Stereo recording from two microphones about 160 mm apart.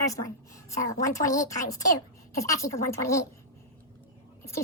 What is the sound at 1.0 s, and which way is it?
A woman's voice, 20° left (ahead or behind).